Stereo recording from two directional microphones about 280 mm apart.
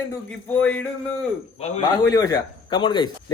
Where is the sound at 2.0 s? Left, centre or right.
Centre.